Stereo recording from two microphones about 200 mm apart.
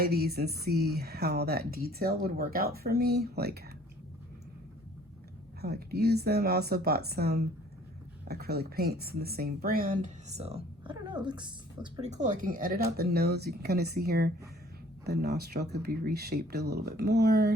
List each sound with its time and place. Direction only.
0.0 s speech: 50° right (ahead or behind)
5.6 s speech: 55° right (ahead or behind); by 12.1 s 25° right (ahead or behind)
12.1 s speech: 40° right (ahead or behind)